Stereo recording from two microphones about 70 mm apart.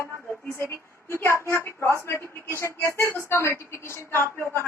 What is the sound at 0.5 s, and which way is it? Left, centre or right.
A woman's voice, left.